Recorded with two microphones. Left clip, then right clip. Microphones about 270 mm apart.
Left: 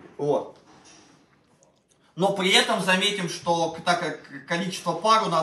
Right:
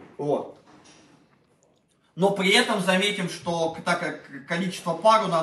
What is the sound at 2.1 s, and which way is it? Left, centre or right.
A man's voice, centre.